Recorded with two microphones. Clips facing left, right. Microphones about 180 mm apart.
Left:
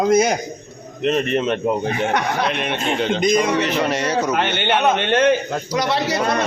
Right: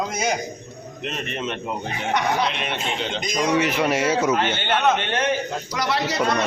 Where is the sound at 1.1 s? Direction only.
55° left (ahead or behind).